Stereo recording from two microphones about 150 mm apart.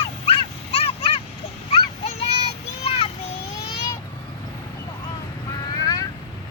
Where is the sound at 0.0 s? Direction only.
40° left (ahead or behind).